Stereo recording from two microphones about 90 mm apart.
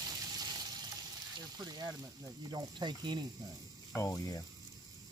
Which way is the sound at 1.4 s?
45° right (ahead or behind).